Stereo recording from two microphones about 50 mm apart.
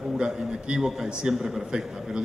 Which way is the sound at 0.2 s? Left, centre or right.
Centre.